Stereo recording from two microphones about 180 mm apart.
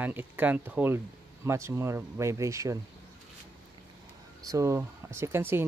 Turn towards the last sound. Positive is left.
turn(degrees=-10)  # may be behind; listen again after turning